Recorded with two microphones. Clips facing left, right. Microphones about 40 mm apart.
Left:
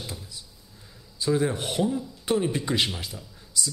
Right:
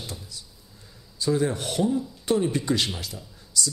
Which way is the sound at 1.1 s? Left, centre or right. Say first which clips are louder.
Even; centre.